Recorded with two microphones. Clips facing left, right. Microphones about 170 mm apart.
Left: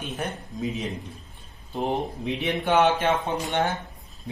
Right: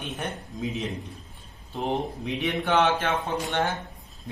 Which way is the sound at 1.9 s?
Centre (ahead or behind).